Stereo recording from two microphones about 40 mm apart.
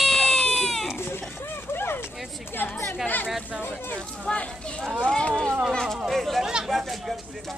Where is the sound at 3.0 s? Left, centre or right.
Left.